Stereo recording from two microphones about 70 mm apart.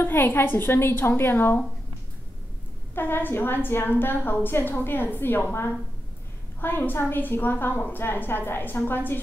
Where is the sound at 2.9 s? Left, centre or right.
Left.